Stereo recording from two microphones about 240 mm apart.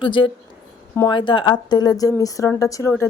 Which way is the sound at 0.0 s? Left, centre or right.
Centre.